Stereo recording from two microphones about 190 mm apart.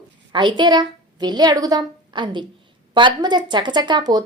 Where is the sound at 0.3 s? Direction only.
25° right (ahead or behind).